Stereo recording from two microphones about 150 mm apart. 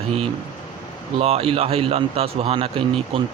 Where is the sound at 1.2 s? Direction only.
40° right (ahead or behind).